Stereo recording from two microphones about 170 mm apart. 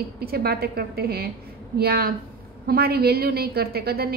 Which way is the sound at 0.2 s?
65° right (ahead or behind).